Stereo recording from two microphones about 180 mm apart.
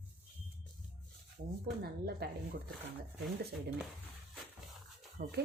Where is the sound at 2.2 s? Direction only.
60° right (ahead or behind).